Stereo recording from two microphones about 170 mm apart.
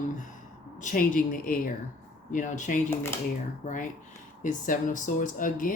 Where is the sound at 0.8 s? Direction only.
50° left (ahead or behind).